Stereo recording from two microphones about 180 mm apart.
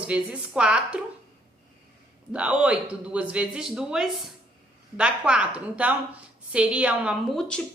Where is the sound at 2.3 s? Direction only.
5° right (ahead or behind).